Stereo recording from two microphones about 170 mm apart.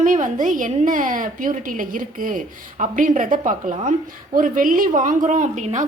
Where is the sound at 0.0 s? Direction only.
50° right (ahead or behind).